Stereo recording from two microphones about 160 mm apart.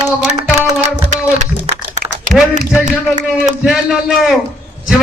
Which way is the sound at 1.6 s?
45° right (ahead or behind).